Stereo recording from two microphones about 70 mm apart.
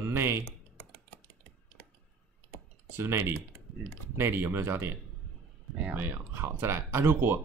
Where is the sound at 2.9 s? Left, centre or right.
Right.